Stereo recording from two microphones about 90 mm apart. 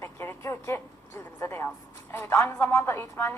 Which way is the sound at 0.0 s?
25° left (ahead or behind).